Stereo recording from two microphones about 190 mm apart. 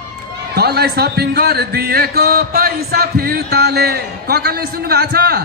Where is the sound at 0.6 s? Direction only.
55° right (ahead or behind).